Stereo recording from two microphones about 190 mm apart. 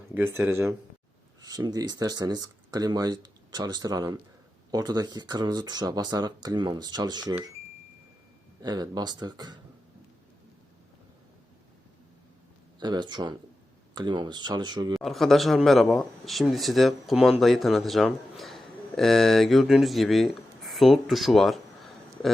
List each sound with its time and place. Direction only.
0.1 s speech: 10° right (ahead or behind)
8.6 s speech: 20° right (ahead or behind)
12.8 s speech: 25° right (ahead or behind)
14.9 s a man's voice: centre (ahead or behind)